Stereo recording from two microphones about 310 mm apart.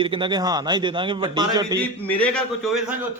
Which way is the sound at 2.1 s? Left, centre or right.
Centre.